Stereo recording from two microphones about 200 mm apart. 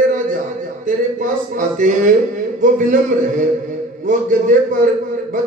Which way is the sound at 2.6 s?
40° right (ahead or behind).